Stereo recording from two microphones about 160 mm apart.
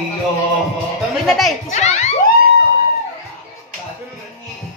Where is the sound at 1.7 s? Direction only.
45° left (ahead or behind).